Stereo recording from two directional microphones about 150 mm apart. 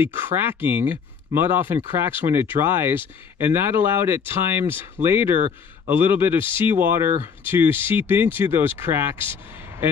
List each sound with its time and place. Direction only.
0.0 s speech: 15° right (ahead or behind)